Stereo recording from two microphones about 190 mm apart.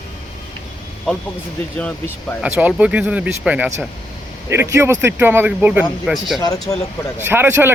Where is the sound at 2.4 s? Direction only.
5° right (ahead or behind).